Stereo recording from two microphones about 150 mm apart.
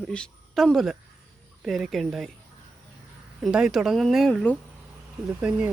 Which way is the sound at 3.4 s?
5° right (ahead or behind).